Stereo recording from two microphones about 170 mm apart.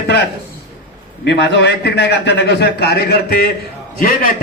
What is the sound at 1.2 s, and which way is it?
A man's voice, 85° left.